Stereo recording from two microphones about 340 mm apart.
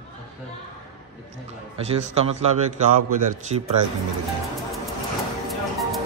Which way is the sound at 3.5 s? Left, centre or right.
Right.